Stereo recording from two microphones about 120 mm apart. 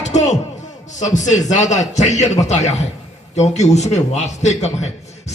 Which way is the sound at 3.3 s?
70° left (ahead or behind).